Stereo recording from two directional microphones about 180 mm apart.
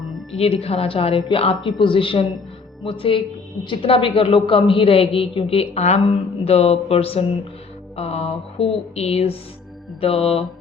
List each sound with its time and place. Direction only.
0.3 s a man's voice: 35° left (ahead or behind)